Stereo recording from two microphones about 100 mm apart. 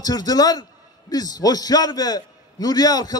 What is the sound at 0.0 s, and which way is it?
A man's voice, 40° left (ahead or behind).